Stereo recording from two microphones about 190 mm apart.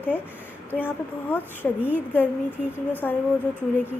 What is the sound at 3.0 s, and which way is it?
Speech, 10° left (ahead or behind).